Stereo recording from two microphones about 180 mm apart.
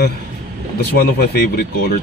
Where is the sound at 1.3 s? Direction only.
60° left (ahead or behind).